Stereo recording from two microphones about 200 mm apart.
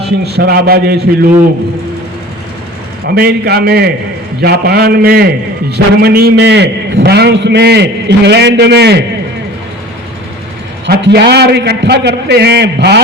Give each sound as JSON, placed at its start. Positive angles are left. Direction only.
{"t": 0.0, "sound": "a man's voice", "side_deg": -55}
{"t": 3.2, "sound": "a man's voice", "side_deg": -50}
{"t": 10.8, "sound": "a man's voice", "side_deg": -55}